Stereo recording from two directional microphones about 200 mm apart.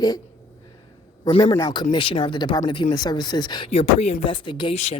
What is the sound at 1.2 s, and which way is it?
Speech, 30° left (ahead or behind).